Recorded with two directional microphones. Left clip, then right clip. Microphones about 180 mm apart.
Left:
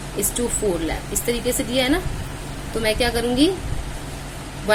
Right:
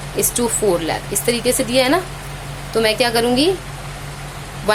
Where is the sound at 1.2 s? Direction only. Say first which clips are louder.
Right 5 dB; 20° right (ahead or behind).